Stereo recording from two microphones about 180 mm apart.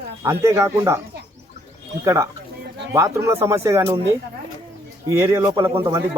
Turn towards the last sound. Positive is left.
turn(degrees=-15)  # may be behind; listen again after turning